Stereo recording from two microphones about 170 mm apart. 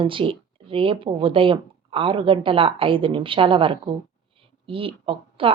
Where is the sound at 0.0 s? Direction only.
30° right (ahead or behind).